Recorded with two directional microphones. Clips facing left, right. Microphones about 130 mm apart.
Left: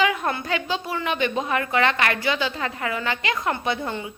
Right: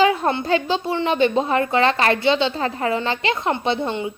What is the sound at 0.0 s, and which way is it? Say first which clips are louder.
A woman's voice: right 5 dB; 30° right (ahead or behind).